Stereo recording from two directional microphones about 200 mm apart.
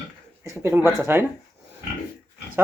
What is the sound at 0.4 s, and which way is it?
Speech, 10° right (ahead or behind).